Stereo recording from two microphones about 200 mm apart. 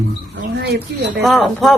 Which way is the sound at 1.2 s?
Centre (ahead or behind).